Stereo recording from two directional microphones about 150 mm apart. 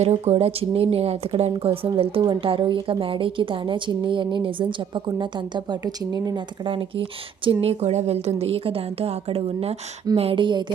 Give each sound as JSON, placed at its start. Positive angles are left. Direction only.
{"t": 0.0, "sound": "speech", "side_deg": -45}